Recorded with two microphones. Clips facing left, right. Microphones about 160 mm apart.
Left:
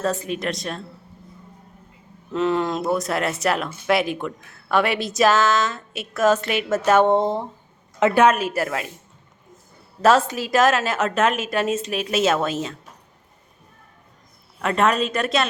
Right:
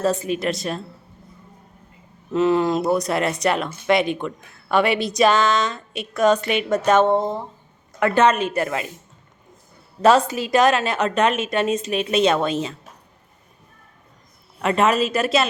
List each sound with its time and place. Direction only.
0.0 s speech: centre (ahead or behind)
2.3 s speech: 5° right (ahead or behind)
7.1 s speech: 25° left (ahead or behind)
8.2 s speech: 5° left (ahead or behind)
10.0 s speech: centre (ahead or behind)
14.6 s speech: centre (ahead or behind)